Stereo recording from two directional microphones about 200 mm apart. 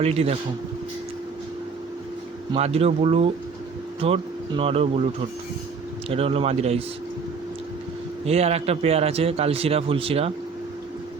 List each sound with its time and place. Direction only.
0.0 s speech: 30° right (ahead or behind)
2.5 s a man's voice: 30° right (ahead or behind)
6.1 s a man's voice: 30° right (ahead or behind)
8.2 s a man's voice: 30° right (ahead or behind)